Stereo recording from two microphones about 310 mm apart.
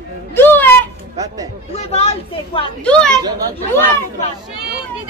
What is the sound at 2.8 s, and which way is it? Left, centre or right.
Speech, centre.